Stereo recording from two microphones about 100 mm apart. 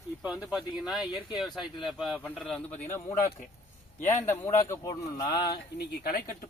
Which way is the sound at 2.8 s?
25° left (ahead or behind).